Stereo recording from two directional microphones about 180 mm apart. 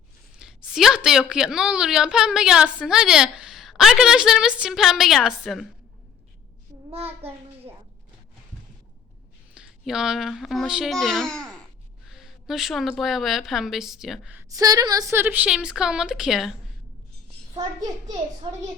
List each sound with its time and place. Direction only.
0.3 s a woman's voice: 5° right (ahead or behind)
6.9 s a sound: 35° right (ahead or behind)
9.6 s a child's voice: 5° right (ahead or behind)
14.5 s a woman's voice: 20° right (ahead or behind); by 16.6 s centre (ahead or behind)